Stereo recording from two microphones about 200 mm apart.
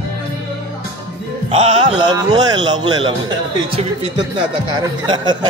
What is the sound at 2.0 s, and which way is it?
Speech, 20° right (ahead or behind).